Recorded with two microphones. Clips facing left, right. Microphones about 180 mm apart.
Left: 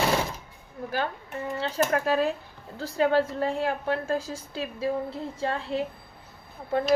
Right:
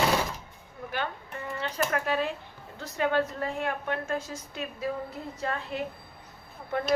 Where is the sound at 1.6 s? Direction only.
30° left (ahead or behind).